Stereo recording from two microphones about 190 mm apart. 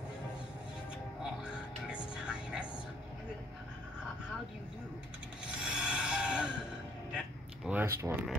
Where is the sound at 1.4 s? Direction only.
5° right (ahead or behind).